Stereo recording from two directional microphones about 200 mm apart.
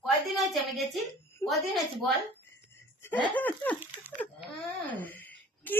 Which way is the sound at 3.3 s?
10° left (ahead or behind).